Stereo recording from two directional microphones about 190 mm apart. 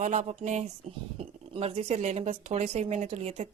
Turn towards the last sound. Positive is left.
turn(degrees=-35)  # may be behind; listen again after turning